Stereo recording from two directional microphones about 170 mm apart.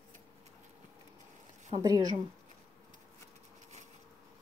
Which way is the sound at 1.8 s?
20° right (ahead or behind).